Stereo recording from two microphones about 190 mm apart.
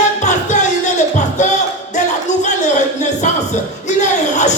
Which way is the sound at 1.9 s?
40° left (ahead or behind).